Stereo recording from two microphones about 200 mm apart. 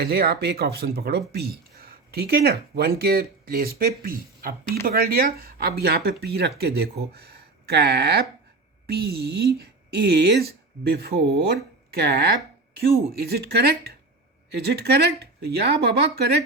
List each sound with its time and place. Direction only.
0.0 s speech: 50° right (ahead or behind)